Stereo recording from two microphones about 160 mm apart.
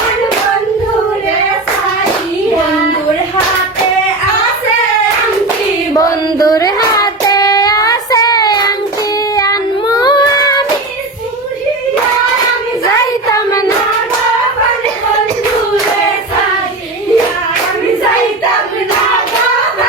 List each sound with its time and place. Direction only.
5.9 s child singing: 20° left (ahead or behind)
13.3 s child singing: 20° left (ahead or behind)